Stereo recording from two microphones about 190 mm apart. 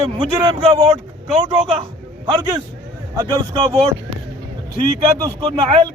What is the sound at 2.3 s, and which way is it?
Speech, 20° right (ahead or behind).